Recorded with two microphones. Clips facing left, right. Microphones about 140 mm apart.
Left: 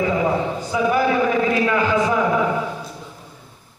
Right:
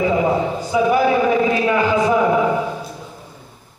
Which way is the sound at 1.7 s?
20° right (ahead or behind).